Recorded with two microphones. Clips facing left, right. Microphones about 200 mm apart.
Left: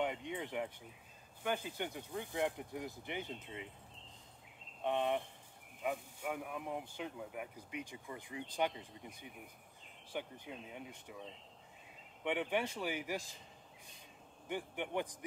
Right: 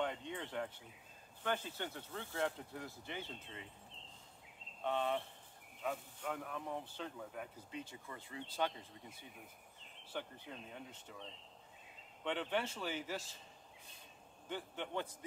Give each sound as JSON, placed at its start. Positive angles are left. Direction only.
{"t": 0.0, "sound": "a sound", "side_deg": 15}
{"t": 1.4, "sound": "speech", "side_deg": 15}
{"t": 4.8, "sound": "speech", "side_deg": 15}
{"t": 14.5, "sound": "speech", "side_deg": 15}